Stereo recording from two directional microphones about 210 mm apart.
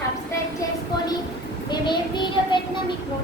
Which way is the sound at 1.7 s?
20° left (ahead or behind).